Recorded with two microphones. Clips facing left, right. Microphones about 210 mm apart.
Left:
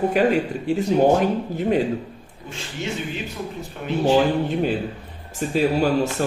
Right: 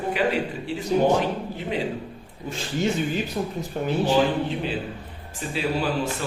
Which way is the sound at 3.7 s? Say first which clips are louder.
Right 10 dB; 40° right (ahead or behind).